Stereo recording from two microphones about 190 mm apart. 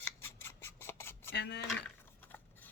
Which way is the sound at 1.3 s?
65° left (ahead or behind).